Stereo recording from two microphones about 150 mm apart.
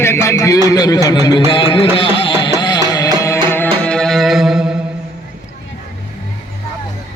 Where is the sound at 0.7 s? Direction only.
25° left (ahead or behind).